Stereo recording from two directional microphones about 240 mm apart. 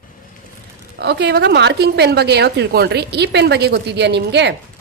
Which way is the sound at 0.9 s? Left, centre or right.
Right.